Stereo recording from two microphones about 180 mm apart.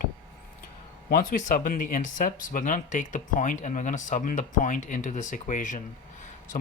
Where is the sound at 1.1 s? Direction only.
45° left (ahead or behind).